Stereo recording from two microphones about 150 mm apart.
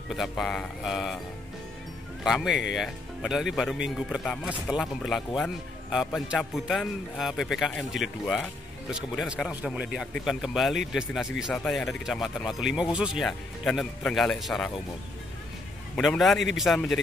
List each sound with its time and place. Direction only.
0.1 s speech: centre (ahead or behind)
2.2 s speech: centre (ahead or behind)
16.0 s speech: centre (ahead or behind)